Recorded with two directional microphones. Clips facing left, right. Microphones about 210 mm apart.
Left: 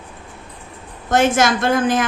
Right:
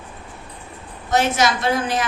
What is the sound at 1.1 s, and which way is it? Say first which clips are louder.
Speech: left 3 dB; 50° left (ahead or behind).